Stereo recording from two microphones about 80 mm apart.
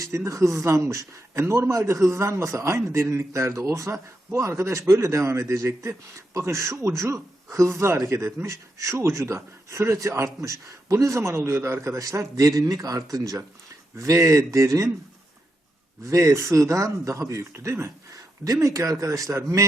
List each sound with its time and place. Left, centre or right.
0.0 s speech: right
16.0 s speech: right